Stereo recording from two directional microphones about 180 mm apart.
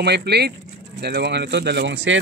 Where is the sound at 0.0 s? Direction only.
65° right (ahead or behind).